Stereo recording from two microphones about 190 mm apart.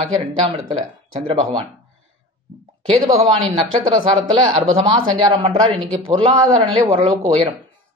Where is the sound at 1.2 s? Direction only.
25° right (ahead or behind).